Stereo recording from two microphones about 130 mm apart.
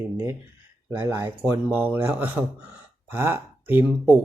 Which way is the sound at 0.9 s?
20° right (ahead or behind).